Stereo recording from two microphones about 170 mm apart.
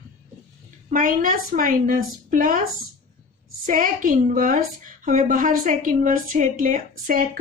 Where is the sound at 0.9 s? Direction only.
55° right (ahead or behind).